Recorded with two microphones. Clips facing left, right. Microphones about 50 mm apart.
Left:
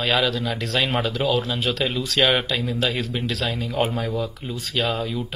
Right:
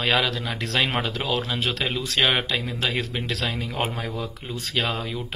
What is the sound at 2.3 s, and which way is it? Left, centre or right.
Speech, right.